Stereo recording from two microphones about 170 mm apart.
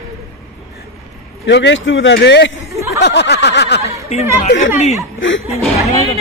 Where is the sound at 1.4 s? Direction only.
90° left.